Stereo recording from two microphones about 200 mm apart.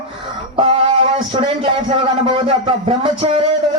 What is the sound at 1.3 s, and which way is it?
A man's voice, 30° right (ahead or behind).